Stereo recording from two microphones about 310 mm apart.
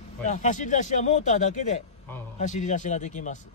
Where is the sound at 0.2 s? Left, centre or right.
Left.